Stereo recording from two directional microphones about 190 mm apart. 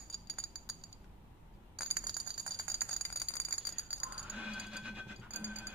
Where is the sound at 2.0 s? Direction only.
20° right (ahead or behind).